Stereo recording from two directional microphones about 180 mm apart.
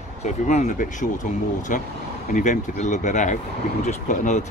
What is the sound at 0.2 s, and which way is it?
Speech, 40° left (ahead or behind).